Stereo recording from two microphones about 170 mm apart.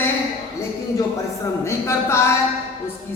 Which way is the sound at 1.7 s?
15° left (ahead or behind).